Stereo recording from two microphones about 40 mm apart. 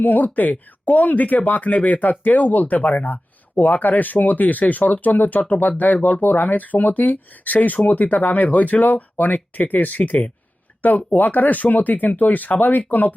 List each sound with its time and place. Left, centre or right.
0.0 s speech: left